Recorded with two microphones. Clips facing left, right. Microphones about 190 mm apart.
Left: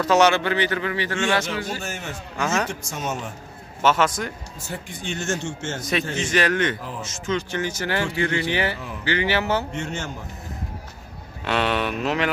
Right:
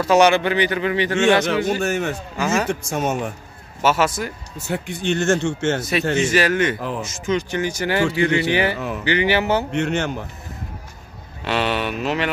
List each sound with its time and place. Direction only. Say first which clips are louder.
0.0 s a man's voice: right 3 dB; 10° right (ahead or behind)
1.8 s speech: right 11 dB; 65° right (ahead or behind)
2.3 s speech: right 2 dB; 5° right (ahead or behind)
2.7 s speech: right 7 dB; 55° right (ahead or behind)
3.8 s a man's voice: right 1 dB; 10° right (ahead or behind)
4.6 s speech: right 8 dB; 70° right (ahead or behind)
5.8 s a man's voice: right 5 dB; 5° right (ahead or behind)
8.7 s speech: right 8 dB; 75° right (ahead or behind)
9.0 s a man's voice: right 3 dB; 15° right (ahead or behind)
9.7 s speech: right 8 dB; 70° right (ahead or behind)
11.4 s speech: right 1 dB; centre (ahead or behind)